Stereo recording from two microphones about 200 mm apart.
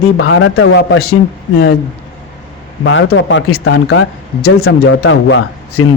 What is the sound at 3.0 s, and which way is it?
Speech, 70° left (ahead or behind).